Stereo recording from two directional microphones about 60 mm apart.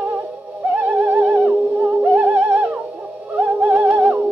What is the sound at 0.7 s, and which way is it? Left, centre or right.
Theremin, right.